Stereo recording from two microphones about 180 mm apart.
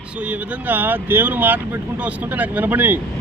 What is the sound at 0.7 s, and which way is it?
Speech, 10° right (ahead or behind).